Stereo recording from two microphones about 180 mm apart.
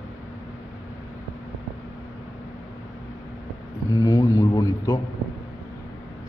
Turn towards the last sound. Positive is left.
turn(degrees=20)  # may be behind; listen again after turning